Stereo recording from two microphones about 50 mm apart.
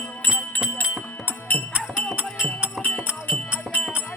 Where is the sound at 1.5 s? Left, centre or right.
Left.